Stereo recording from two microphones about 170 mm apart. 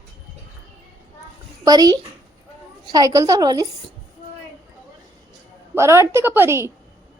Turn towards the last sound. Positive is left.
turn(degrees=-15)  # may be behind; listen again after turning